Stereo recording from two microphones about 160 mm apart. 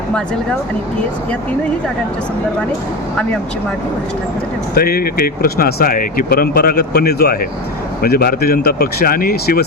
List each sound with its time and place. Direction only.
4.7 s speech: 70° left (ahead or behind)